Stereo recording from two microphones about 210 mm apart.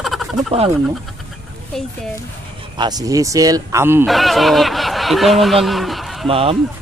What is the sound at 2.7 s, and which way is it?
Speech, 20° right (ahead or behind).